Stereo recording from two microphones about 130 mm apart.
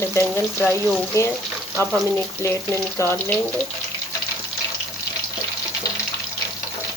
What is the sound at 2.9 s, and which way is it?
Speech, 20° left (ahead or behind).